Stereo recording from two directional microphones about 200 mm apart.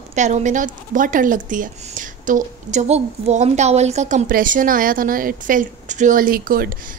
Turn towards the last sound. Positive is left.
turn(degrees=-45)  # may be behind; listen again after turning